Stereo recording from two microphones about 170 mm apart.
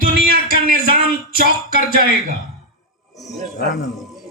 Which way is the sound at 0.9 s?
60° right (ahead or behind).